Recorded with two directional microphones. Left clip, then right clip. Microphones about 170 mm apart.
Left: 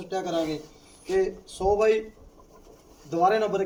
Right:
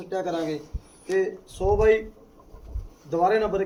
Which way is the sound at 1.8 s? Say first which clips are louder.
Right 3 dB; 15° left (ahead or behind).